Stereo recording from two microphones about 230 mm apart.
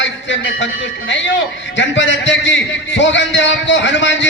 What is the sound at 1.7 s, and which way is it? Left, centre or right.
A man's voice, left.